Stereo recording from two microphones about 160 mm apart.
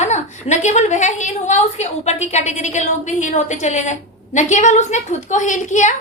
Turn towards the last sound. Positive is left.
turn(degrees=50)  # may be behind; listen again after turning